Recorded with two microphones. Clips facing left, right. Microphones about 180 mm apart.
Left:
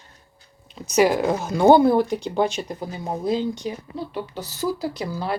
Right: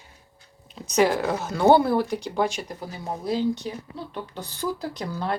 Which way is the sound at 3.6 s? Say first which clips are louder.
Left 4 dB; 10° left (ahead or behind).